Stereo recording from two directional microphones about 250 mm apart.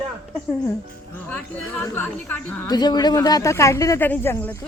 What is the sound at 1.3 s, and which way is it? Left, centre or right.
A woman's voice, centre.